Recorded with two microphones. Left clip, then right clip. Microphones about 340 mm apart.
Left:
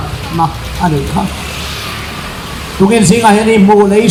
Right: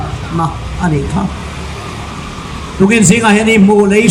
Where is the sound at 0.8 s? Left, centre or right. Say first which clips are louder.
Left 3 dB; centre.